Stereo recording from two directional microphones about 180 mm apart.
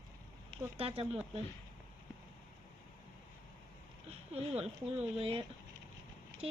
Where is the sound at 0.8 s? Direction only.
30° right (ahead or behind).